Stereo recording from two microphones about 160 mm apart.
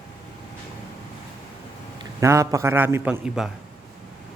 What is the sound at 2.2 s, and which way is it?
A man's voice, 20° right (ahead or behind).